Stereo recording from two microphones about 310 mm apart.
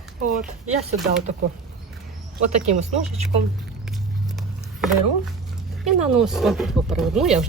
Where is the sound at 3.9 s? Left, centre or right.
Centre.